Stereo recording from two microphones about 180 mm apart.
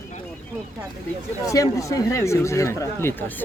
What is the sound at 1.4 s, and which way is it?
Speech, 15° left (ahead or behind).